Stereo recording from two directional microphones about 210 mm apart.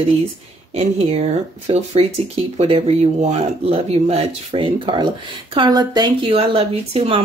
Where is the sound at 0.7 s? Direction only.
30° right (ahead or behind).